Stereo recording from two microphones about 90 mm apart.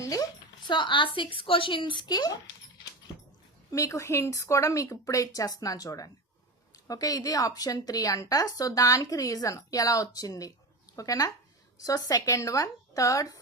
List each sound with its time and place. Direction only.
0.0 s a sound: 40° left (ahead or behind)
0.7 s speech: 65° left (ahead or behind); by 2.4 s 45° left (ahead or behind)
3.7 s speech: 35° left (ahead or behind)